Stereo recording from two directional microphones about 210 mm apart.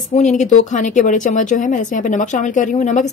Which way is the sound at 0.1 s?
35° left (ahead or behind).